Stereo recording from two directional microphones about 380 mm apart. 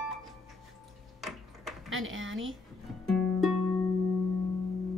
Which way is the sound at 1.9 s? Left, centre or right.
Right.